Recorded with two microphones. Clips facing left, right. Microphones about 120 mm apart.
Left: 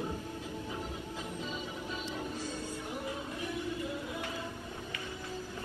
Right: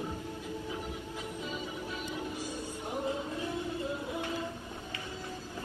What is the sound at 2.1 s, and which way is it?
Music, 15° right (ahead or behind).